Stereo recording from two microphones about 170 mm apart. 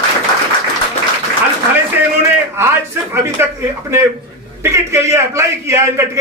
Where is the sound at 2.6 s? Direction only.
15° right (ahead or behind).